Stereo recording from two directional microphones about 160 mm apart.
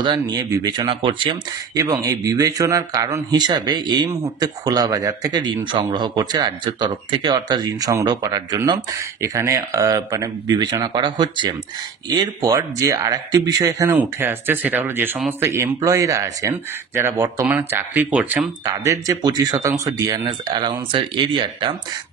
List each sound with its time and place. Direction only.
0.0 s speech: 25° right (ahead or behind); by 18.5 s 10° right (ahead or behind)
18.7 s speech: 20° right (ahead or behind)